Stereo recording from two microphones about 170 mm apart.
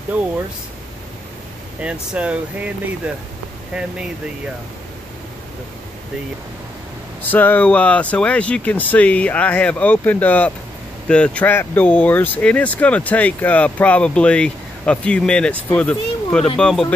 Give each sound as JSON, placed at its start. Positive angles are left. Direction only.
{"t": 1.8, "sound": "speech", "side_deg": -5}
{"t": 7.2, "sound": "speech", "side_deg": 10}